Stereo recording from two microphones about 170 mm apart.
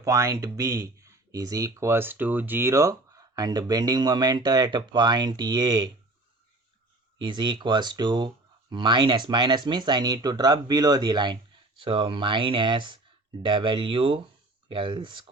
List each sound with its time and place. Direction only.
0.0 s speech: 20° right (ahead or behind)
7.2 s speech: 30° right (ahead or behind)